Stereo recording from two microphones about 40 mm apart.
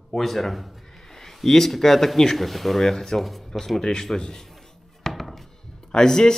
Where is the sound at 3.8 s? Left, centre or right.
Centre.